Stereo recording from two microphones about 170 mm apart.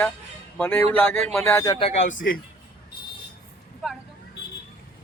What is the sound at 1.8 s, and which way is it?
Speech, 35° left (ahead or behind).